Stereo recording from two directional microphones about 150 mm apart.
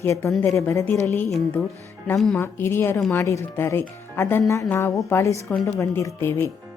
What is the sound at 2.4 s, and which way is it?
A woman's voice, 15° left (ahead or behind).